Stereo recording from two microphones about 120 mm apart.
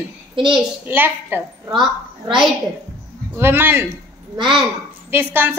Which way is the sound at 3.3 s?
20° right (ahead or behind).